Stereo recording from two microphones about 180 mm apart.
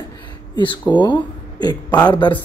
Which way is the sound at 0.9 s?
25° left (ahead or behind).